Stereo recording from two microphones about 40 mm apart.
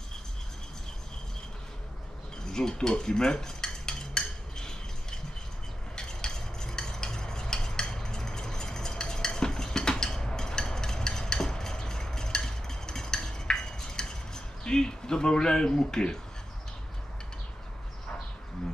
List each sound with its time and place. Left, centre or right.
2.5 s cutlery: centre
5.9 s stir: centre